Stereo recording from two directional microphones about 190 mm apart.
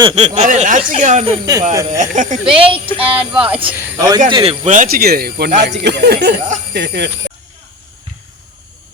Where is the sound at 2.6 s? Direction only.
30° right (ahead or behind).